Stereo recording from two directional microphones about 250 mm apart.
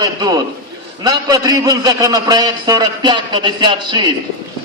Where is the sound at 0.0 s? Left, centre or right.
Centre.